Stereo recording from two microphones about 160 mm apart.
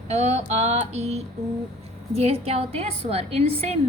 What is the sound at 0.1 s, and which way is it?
A woman's voice, 45° right (ahead or behind).